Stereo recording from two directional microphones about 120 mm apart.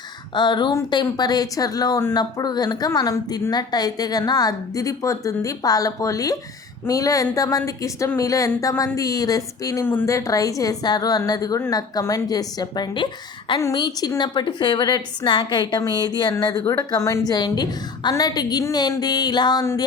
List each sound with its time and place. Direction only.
0.3 s a woman's voice: 40° left (ahead or behind)